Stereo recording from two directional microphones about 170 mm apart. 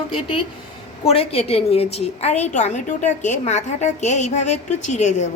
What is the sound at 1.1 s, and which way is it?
A woman's voice, 35° left (ahead or behind).